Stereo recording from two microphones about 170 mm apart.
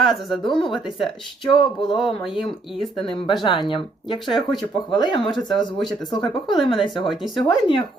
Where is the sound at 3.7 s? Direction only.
30° left (ahead or behind).